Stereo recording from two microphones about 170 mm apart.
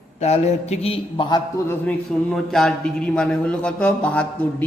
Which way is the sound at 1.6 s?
15° left (ahead or behind).